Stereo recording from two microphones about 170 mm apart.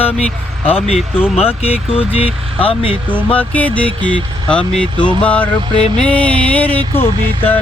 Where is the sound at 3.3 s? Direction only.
10° left (ahead or behind).